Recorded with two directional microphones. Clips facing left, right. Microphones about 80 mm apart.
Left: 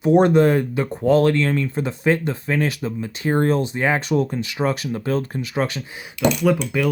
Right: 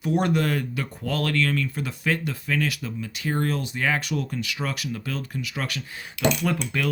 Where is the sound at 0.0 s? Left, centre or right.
Left.